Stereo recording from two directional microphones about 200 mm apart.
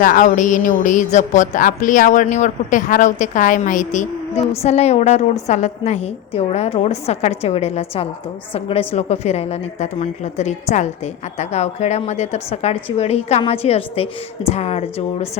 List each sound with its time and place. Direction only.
0.0 s speech: 40° left (ahead or behind)